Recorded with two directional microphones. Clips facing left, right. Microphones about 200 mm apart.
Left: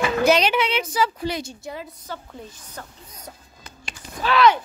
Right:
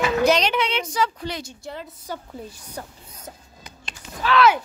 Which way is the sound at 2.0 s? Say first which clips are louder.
Right 2 dB; 10° right (ahead or behind).